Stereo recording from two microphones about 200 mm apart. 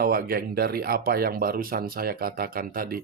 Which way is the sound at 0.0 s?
50° right (ahead or behind).